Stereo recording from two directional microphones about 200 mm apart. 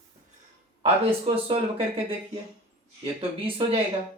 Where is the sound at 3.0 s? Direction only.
25° right (ahead or behind).